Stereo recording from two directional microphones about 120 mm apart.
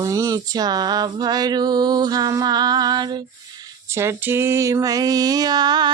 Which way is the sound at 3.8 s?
20° right (ahead or behind).